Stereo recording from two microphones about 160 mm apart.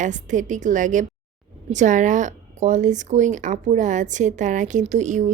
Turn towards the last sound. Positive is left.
turn(degrees=-50)  # may be behind; listen again after turning